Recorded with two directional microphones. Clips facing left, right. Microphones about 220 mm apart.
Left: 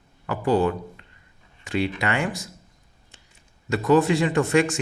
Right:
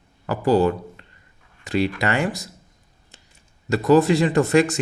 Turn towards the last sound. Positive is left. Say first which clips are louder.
# right 3 dB
turn(degrees=-35)  # may be behind; listen again after turning